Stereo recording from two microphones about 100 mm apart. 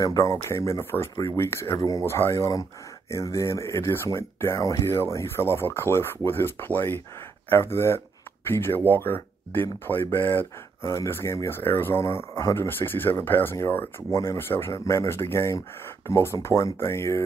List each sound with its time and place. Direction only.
0.0 s speech: 35° left (ahead or behind)